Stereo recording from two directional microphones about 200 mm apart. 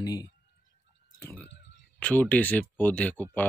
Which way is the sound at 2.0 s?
10° left (ahead or behind).